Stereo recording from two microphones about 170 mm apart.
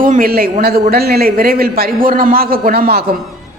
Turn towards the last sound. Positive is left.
turn(degrees=-65)  # may be behind; listen again after turning